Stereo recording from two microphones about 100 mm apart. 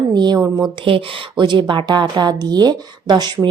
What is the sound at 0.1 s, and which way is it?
Speech, 45° right (ahead or behind).